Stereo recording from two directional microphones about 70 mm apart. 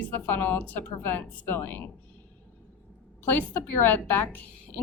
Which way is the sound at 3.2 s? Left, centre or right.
Left.